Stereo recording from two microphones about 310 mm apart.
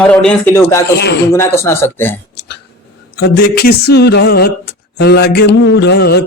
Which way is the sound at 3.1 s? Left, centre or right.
Left.